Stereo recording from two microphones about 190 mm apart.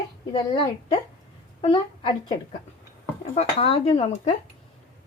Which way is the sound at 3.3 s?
30° left (ahead or behind).